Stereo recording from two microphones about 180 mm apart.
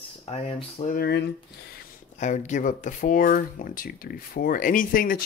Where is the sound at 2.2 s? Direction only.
40° left (ahead or behind).